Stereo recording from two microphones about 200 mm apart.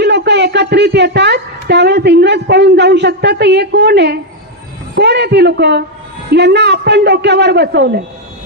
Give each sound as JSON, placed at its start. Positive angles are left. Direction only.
{"t": 0.0, "sound": "a woman's voice", "side_deg": -60}